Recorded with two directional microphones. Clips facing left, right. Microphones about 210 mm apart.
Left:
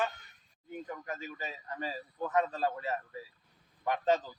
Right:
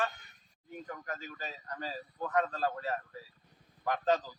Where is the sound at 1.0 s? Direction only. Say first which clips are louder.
Left 2 dB; 5° left (ahead or behind).